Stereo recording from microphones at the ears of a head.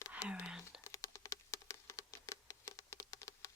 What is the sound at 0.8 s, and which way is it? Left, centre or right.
Patter, left.